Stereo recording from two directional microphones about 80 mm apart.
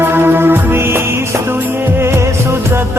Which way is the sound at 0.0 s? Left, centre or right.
Right.